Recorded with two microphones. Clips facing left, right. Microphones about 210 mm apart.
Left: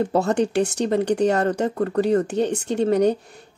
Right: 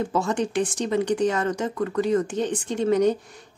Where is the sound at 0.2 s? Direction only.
65° left (ahead or behind).